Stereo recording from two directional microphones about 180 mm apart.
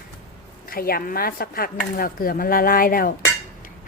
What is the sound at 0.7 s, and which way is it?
Speech, 55° left (ahead or behind).